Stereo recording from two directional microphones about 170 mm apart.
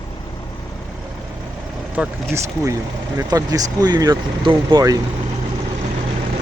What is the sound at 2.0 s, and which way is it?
Speech, 5° right (ahead or behind).